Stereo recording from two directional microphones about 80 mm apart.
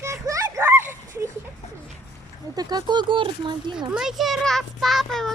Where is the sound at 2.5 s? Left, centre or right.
Right.